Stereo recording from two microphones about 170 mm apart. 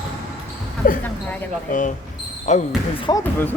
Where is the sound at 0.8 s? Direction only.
55° left (ahead or behind).